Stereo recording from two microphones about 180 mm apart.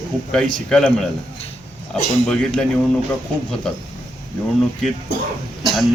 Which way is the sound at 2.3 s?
5° left (ahead or behind).